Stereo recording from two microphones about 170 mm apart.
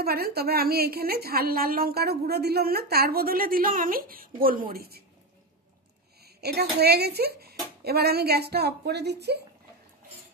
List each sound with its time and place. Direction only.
0.0 s a woman's voice: 65° right (ahead or behind)
6.2 s speech: 70° right (ahead or behind)